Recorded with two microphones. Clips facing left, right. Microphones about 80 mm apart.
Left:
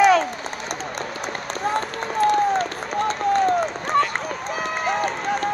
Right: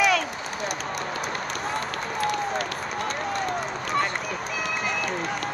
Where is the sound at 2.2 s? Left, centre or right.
Left.